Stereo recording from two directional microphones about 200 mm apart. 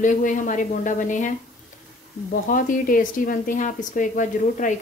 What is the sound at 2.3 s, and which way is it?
A woman's voice, 45° left (ahead or behind).